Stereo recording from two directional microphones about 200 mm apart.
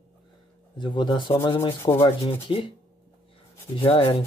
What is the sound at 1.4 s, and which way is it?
Sanding, 15° left (ahead or behind).